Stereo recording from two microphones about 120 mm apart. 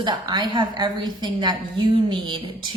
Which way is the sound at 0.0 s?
40° right (ahead or behind).